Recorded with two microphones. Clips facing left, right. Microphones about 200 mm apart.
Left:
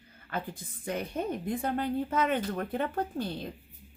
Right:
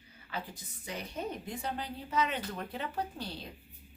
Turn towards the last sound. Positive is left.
turn(degrees=50)  # may be behind; listen again after turning